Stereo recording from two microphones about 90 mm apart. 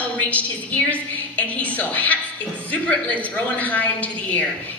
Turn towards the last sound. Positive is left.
turn(degrees=15)  # may be behind; listen again after turning